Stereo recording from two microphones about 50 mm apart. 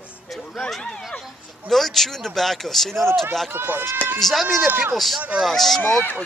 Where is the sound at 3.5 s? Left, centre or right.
Right.